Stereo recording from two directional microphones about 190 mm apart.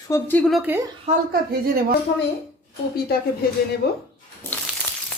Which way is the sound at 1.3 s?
55° right (ahead or behind).